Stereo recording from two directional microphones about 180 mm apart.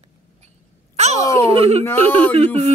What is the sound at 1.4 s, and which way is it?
Speech, 35° right (ahead or behind).